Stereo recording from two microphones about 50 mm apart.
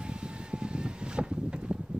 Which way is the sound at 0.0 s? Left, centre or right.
Centre.